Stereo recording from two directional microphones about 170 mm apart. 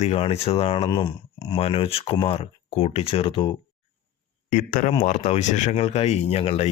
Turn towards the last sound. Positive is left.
turn(degrees=35)  # may be behind; listen again after turning